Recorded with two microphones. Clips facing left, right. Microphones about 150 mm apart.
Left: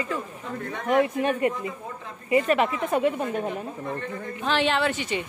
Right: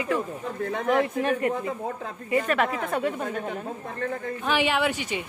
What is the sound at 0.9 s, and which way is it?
A woman's voice, centre (ahead or behind).